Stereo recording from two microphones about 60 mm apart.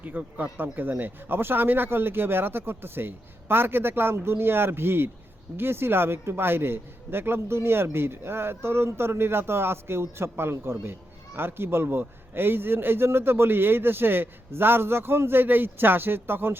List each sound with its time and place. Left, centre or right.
0.0 s a man's voice: right